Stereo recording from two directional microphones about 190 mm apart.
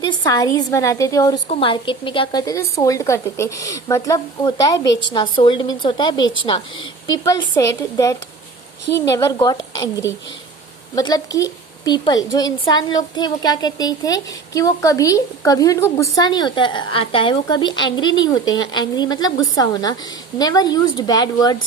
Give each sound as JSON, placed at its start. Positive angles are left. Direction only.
{"t": 0.0, "sound": "a woman's voice", "side_deg": 20}
{"t": 1.5, "sound": "a woman's voice", "side_deg": 30}